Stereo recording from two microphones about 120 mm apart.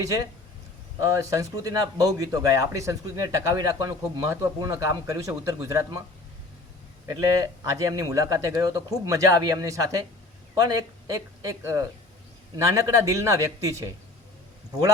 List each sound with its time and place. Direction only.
0.0 s speech: 30° right (ahead or behind)
7.1 s speech: 30° right (ahead or behind)
11.1 s speech: 25° right (ahead or behind)